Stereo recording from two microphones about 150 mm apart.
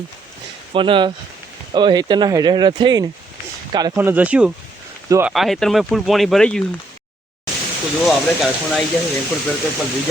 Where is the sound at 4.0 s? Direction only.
10° right (ahead or behind); by 6.6 s 5° left (ahead or behind).